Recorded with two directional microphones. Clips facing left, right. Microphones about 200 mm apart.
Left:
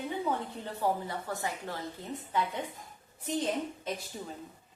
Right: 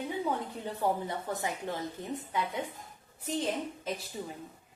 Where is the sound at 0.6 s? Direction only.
20° right (ahead or behind).